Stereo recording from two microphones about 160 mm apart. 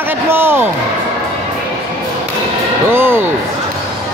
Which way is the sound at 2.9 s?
15° right (ahead or behind).